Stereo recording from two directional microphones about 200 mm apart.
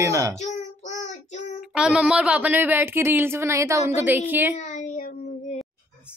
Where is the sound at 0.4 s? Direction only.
35° left (ahead or behind).